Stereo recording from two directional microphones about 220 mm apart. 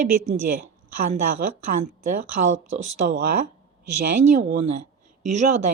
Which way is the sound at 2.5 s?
40° right (ahead or behind).